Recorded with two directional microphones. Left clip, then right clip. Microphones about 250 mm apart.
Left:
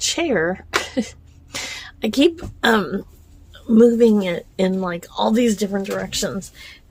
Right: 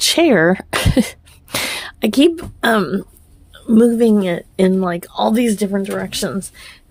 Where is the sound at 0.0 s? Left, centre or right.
Right.